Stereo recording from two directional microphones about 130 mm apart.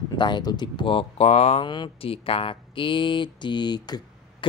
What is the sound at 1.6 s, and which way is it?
Speech, 35° left (ahead or behind).